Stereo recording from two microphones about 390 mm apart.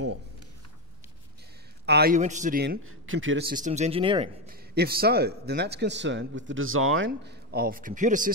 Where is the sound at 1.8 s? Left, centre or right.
Right.